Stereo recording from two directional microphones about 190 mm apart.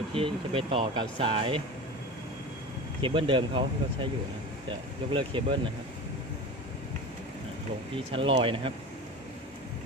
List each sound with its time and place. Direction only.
0.1 s speech: 30° right (ahead or behind)
3.0 s speech: 25° right (ahead or behind)
7.9 s speech: 25° right (ahead or behind)